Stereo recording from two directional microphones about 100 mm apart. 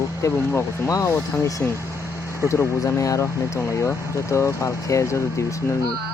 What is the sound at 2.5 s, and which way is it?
Speech, 30° left (ahead or behind).